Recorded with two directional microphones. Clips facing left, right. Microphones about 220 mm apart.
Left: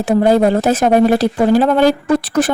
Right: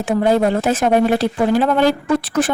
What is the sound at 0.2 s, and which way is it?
Speech, 40° left (ahead or behind).